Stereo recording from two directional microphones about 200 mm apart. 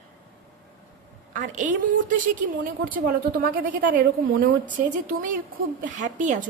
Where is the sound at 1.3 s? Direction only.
40° right (ahead or behind).